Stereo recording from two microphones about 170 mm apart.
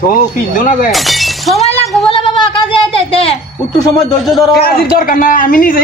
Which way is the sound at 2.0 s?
30° left (ahead or behind).